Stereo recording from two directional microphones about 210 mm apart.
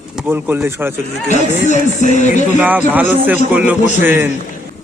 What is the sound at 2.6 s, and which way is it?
Speech, 10° right (ahead or behind).